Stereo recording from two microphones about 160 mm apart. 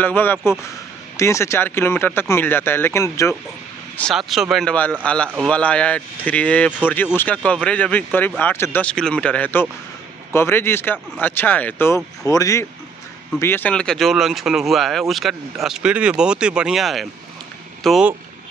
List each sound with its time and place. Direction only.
0.0 s speech: 10° left (ahead or behind)
3.9 s speech: 5° left (ahead or behind)